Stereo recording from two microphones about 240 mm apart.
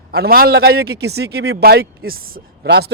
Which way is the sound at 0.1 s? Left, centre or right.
Right.